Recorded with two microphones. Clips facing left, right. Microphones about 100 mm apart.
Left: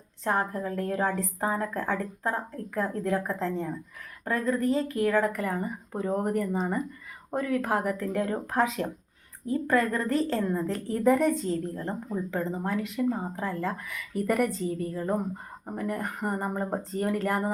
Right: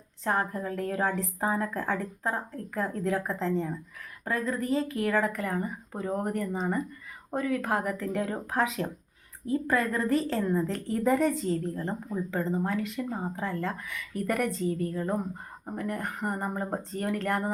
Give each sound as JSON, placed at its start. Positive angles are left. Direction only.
{"t": 0.3, "sound": "speech", "side_deg": 0}